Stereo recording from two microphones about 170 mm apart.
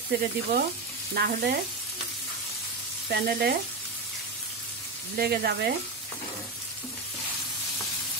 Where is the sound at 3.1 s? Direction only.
70° right (ahead or behind).